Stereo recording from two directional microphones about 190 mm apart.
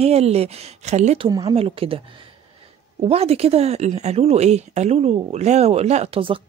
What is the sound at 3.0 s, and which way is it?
Speech, 35° right (ahead or behind).